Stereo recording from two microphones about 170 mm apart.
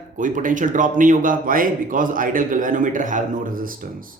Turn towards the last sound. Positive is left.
turn(degrees=-55)  # may be behind; listen again after turning